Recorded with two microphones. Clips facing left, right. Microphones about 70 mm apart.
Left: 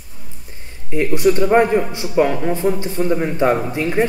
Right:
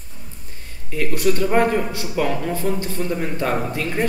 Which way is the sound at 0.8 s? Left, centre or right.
Left.